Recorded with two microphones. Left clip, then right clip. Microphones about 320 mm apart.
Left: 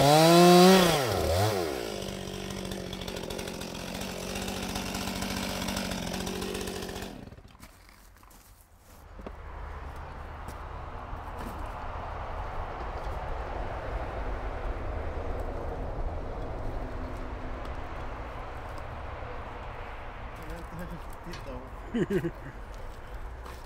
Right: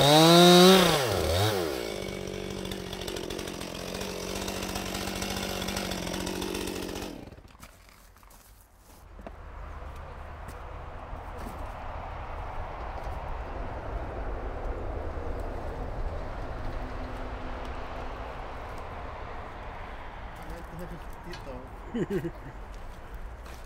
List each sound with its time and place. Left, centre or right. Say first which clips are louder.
0.0 s chainsaw: right 1 dB; centre
2.9 s chainsaw: right 2 dB; centre; by 7.1 s right
21.9 s speech: left 2 dB; centre